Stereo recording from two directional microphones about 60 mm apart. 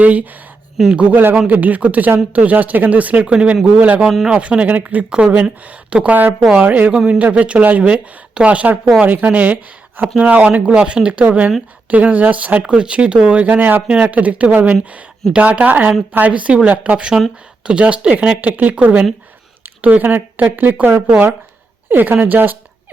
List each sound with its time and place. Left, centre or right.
0.0 s speech: right